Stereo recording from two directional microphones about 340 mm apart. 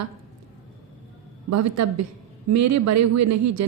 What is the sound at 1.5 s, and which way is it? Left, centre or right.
A woman's voice, right.